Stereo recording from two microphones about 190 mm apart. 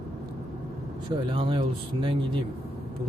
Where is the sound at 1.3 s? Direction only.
25° right (ahead or behind).